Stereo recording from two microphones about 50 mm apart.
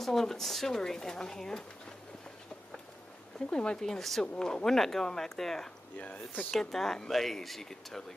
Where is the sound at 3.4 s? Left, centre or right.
Centre.